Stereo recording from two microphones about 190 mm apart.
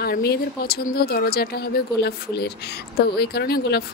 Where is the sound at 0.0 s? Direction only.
55° left (ahead or behind).